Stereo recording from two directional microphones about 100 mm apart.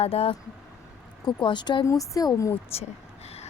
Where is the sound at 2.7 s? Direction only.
90° left.